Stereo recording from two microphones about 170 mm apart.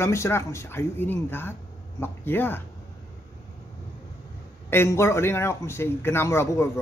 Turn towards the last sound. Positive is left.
turn(degrees=15)  # may be behind; listen again after turning